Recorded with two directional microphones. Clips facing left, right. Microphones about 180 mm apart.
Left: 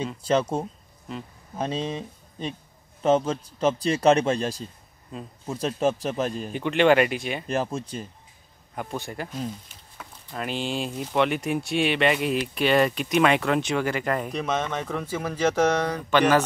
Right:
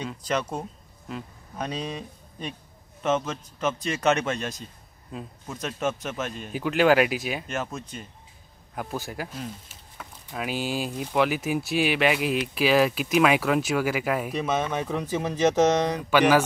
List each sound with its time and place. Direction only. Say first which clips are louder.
0.3 s speech: left 5 dB; 30° left (ahead or behind)
6.5 s speech: even; 5° right (ahead or behind)
7.4 s speech: left 5 dB; 35° left (ahead or behind)
8.7 s speech: even; centre (ahead or behind); by 16.0 s 20° right (ahead or behind)
16.0 s mantra: left 1 dB; 10° right (ahead or behind)